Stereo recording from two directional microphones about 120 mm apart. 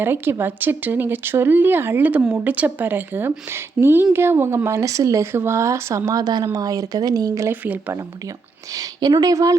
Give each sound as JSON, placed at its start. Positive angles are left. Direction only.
{"t": 0.0, "sound": "speech", "side_deg": -20}
{"t": 7.5, "sound": "speech", "side_deg": -15}
{"t": 8.7, "sound": "speech", "side_deg": -35}